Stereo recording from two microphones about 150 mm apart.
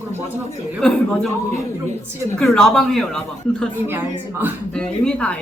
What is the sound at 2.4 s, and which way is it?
Speech, centre (ahead or behind).